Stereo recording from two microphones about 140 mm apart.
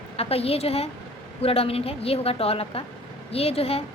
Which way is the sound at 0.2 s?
45° left (ahead or behind).